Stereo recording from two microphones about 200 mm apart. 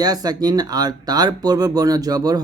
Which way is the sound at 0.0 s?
20° right (ahead or behind).